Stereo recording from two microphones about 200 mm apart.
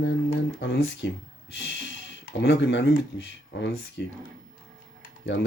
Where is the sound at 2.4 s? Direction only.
65° left (ahead or behind).